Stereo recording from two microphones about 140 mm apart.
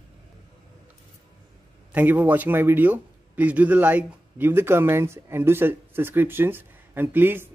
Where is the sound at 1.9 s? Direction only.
10° right (ahead or behind).